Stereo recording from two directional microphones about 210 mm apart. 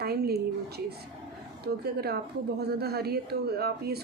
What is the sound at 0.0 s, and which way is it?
Speech, 50° right (ahead or behind).